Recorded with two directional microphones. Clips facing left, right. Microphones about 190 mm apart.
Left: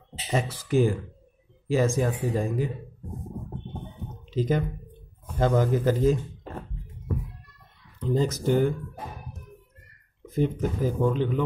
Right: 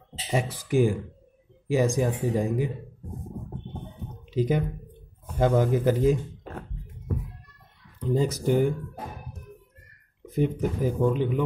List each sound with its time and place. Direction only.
0.3 s speech: 15° right (ahead or behind)
4.3 s a man's voice: 10° right (ahead or behind)
8.0 s speech: 10° right (ahead or behind)
10.2 s speech: 15° right (ahead or behind)